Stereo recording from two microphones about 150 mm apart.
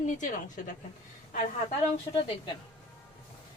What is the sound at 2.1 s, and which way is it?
Speech, 35° left (ahead or behind).